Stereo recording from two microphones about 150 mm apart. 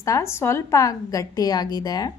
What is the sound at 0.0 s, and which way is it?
A woman's voice, 20° left (ahead or behind).